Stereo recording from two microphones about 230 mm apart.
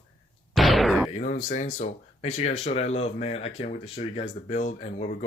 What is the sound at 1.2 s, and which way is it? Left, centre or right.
Speech, left.